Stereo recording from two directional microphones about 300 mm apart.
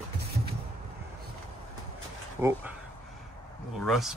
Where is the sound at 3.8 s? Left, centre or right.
Centre.